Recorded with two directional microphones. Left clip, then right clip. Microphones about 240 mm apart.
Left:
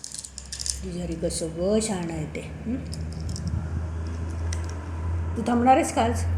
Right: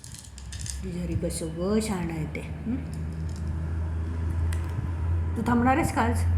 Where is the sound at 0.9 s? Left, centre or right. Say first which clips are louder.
Left 2 dB; centre.